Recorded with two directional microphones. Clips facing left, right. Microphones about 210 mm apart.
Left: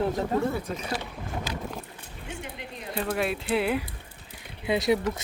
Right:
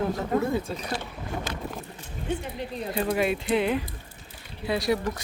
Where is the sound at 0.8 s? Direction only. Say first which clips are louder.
Even; centre (ahead or behind).